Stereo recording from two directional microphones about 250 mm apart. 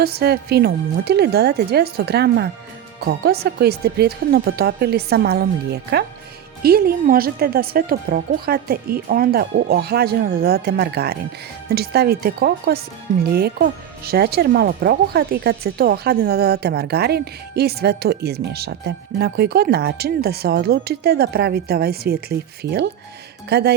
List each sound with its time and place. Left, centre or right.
0.0 s speech: right